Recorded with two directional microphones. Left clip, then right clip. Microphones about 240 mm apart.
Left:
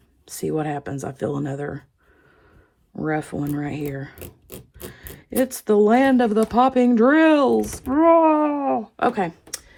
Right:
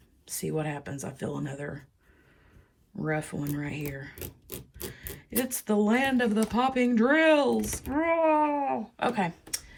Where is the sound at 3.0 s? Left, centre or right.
Left.